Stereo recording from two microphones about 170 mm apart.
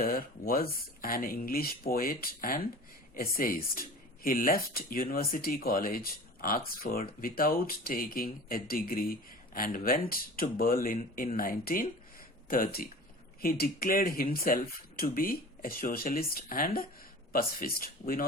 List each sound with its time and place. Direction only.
0.0 s speech: 60° left (ahead or behind)